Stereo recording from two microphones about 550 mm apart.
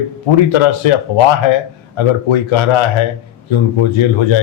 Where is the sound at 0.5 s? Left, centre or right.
Left.